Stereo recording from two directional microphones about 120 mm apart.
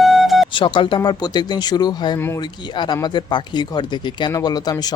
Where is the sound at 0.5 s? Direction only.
45° left (ahead or behind).